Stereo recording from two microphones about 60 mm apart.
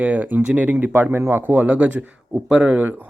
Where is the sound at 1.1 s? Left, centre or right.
Right.